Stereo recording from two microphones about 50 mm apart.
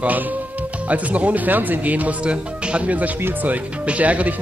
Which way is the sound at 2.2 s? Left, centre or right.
Right.